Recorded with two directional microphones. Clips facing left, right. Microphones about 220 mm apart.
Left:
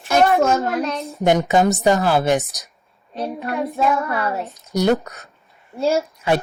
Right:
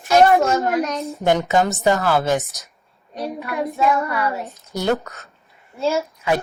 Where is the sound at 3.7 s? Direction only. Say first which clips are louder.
Right 1 dB; 45° left (ahead or behind).